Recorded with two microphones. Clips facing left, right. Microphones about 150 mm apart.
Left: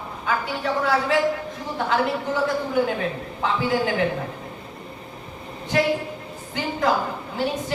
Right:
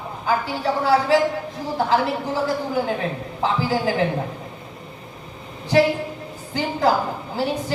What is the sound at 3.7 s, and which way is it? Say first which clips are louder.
Speech: right 1 dB; 30° right (ahead or behind).